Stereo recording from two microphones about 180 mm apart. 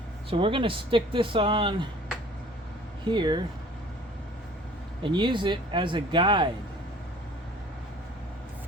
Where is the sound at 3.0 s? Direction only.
25° right (ahead or behind).